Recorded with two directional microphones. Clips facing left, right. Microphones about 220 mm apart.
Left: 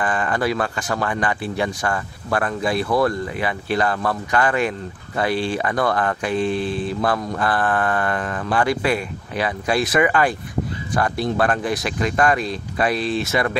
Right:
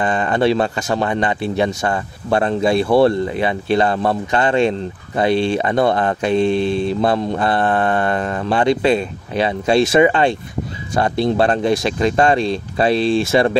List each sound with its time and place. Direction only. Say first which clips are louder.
0.0 s speech: right 5 dB; 25° right (ahead or behind)